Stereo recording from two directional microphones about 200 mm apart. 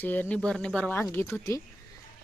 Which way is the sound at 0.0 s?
10° left (ahead or behind).